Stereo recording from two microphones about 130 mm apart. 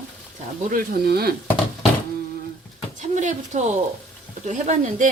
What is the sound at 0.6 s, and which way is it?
Speech, 90° right.